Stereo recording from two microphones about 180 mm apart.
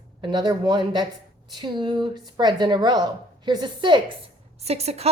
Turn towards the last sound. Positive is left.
turn(degrees=-35)  # may be behind; listen again after turning